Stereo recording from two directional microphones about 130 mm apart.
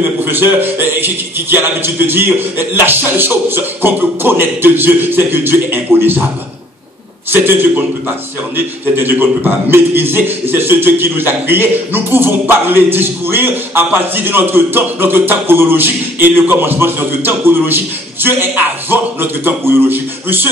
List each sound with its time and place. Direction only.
0.2 s a man's voice: 15° right (ahead or behind)
7.2 s a man's voice: 15° right (ahead or behind)